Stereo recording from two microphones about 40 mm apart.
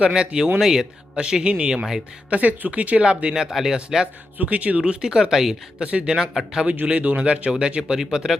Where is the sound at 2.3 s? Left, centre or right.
Right.